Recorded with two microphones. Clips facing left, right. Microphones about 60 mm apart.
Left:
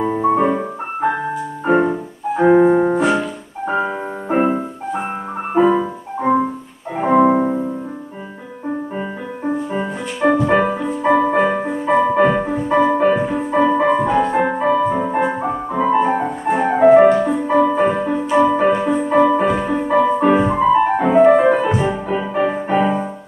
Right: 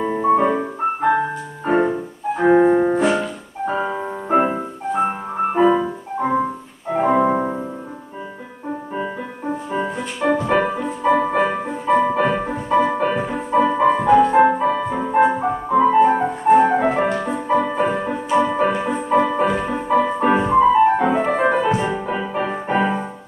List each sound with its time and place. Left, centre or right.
0.0 s music: centre
6.9 s music: centre
9.7 s music: centre